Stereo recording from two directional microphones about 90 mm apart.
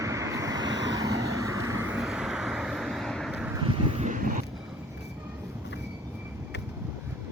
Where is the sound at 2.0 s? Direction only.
5° right (ahead or behind).